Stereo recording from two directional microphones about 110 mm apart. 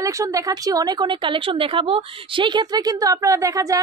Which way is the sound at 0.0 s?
30° right (ahead or behind).